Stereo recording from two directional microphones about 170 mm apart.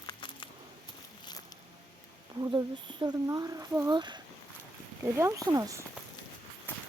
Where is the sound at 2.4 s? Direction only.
25° right (ahead or behind).